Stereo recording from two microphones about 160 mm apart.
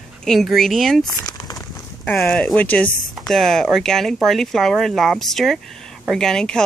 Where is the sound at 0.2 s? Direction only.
Centre (ahead or behind).